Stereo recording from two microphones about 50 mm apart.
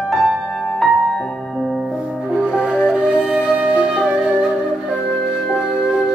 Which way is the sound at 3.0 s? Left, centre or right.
Right.